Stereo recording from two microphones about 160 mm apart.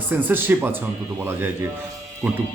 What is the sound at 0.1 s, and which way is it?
A man's voice, 10° right (ahead or behind).